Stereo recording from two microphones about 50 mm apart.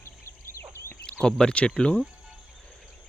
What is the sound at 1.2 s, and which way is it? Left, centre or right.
Speech, centre.